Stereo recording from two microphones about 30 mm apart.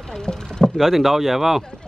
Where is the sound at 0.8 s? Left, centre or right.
Centre.